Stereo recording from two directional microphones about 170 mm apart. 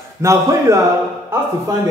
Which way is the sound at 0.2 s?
15° right (ahead or behind).